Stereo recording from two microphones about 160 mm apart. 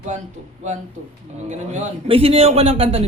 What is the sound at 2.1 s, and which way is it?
Speech, 35° right (ahead or behind).